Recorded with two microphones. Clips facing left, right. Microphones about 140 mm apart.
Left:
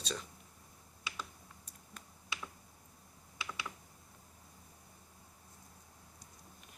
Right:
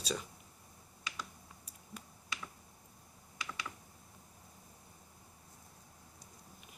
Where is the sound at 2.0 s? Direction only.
10° right (ahead or behind).